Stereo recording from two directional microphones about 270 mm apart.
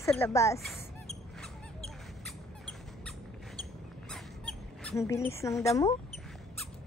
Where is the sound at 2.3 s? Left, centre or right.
Centre.